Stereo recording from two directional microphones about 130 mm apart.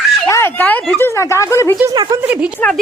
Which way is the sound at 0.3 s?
20° left (ahead or behind).